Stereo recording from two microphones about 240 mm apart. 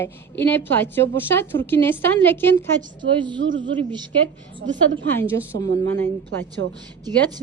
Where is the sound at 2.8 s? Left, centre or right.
Centre.